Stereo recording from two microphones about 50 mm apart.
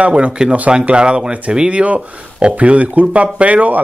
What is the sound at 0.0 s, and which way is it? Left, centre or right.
Speech, right.